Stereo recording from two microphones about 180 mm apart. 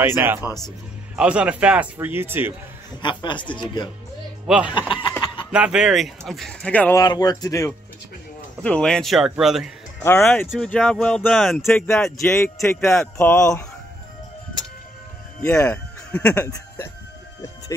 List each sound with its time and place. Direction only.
0.0 s speech: 10° right (ahead or behind)
3.0 s speech: 25° left (ahead or behind)
4.5 s speech: 5° right (ahead or behind)
4.7 s speech: 25° left (ahead or behind)
5.2 s a sound: 30° left (ahead or behind)
5.5 s speech: 5° right (ahead or behind)
7.0 s speech: 20° left (ahead or behind)
8.6 s speech: 5° left (ahead or behind)
10.2 s speech: 10° left (ahead or behind)
15.5 s speech: 15° left (ahead or behind)